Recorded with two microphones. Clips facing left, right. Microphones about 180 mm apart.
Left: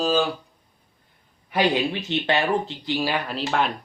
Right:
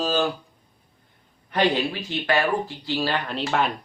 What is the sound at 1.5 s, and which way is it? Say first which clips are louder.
Speech: even; 10° left (ahead or behind).